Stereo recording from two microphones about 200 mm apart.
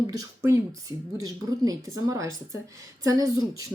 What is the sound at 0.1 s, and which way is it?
A woman's voice, 15° right (ahead or behind).